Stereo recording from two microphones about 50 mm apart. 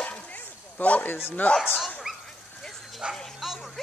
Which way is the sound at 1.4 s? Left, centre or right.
Left.